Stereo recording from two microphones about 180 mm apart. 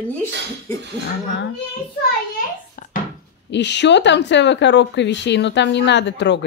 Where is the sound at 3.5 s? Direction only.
75° left (ahead or behind).